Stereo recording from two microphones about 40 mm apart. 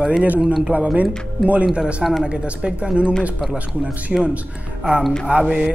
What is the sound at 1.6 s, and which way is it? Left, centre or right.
Mantra, right.